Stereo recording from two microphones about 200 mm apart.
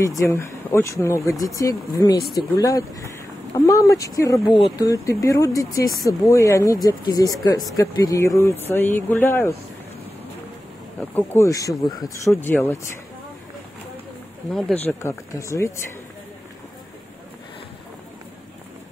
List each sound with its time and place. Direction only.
0.2 s speech: 15° left (ahead or behind)
11.0 s speech: 10° left (ahead or behind)
14.5 s speech: 5° left (ahead or behind)